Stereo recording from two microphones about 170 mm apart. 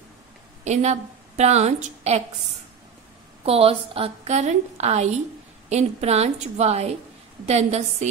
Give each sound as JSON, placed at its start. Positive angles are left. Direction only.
{"t": 0.7, "sound": "a woman's voice", "side_deg": -40}
{"t": 3.4, "sound": "a woman's voice", "side_deg": -35}